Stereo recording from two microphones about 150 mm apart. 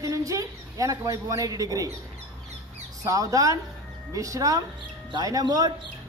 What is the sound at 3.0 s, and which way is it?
Speech, 20° right (ahead or behind).